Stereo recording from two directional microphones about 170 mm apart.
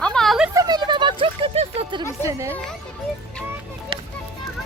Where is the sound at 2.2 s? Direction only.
15° right (ahead or behind).